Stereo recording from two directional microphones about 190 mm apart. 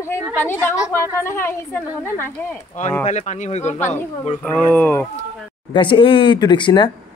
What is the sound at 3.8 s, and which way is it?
A woman's voice, 10° left (ahead or behind).